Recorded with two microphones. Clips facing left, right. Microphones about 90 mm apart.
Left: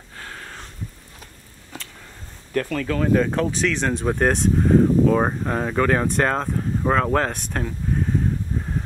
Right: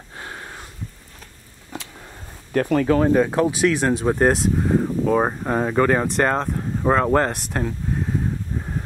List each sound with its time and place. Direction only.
0.2 s a sound: 15° right (ahead or behind)
2.8 s speech: 30° right (ahead or behind)
3.1 s speech: 10° right (ahead or behind)